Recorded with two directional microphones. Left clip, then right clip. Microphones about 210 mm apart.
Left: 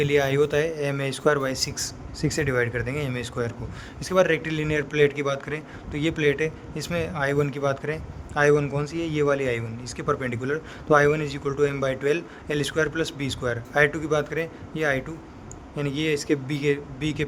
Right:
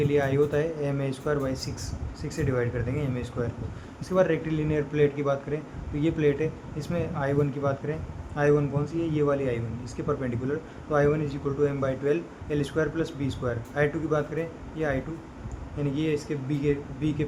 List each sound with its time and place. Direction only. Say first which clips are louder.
0.0 s a man's voice: left 3 dB; 55° left (ahead or behind)